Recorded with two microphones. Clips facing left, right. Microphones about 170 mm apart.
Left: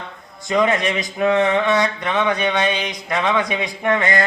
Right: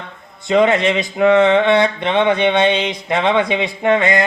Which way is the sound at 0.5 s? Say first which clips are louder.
Right 5 dB; 25° right (ahead or behind).